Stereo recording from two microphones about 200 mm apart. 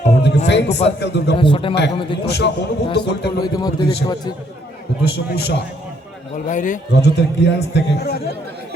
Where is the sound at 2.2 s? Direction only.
55° left (ahead or behind).